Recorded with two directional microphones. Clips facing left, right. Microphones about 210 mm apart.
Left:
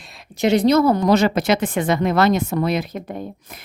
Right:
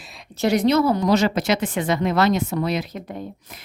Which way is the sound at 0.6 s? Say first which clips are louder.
Left 3 dB; 40° left (ahead or behind).